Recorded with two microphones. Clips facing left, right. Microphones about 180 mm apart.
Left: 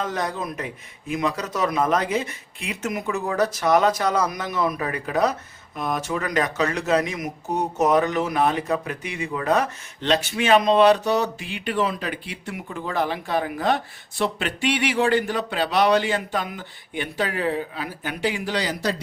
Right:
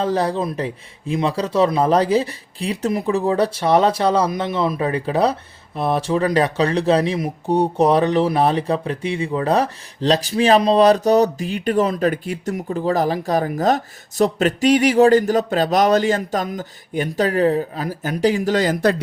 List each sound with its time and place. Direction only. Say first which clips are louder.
0.0 s a man's voice: right 7 dB; 30° right (ahead or behind); by 18.9 s 50° right (ahead or behind)